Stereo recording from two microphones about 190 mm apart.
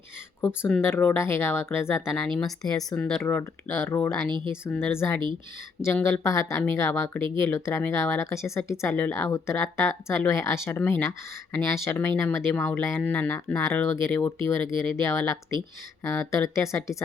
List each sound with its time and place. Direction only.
0.4 s speech: 10° left (ahead or behind)
4.3 s speech: 25° right (ahead or behind)
4.6 s speech: 10° left (ahead or behind)